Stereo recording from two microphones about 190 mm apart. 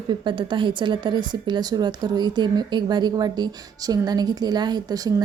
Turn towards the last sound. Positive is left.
turn(degrees=-20)  # may be behind; listen again after turning